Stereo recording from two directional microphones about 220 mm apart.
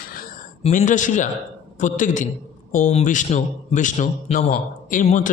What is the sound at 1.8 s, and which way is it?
A man's voice, 35° left (ahead or behind).